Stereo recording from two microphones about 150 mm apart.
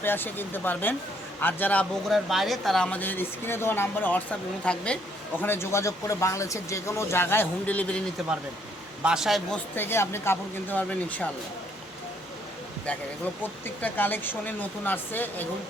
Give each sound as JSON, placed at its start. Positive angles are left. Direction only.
{"t": 0.0, "sound": "speech", "side_deg": 15}
{"t": 9.0, "sound": "speech", "side_deg": -5}
{"t": 9.7, "sound": "speech", "side_deg": 15}
{"t": 13.4, "sound": "speech", "side_deg": 10}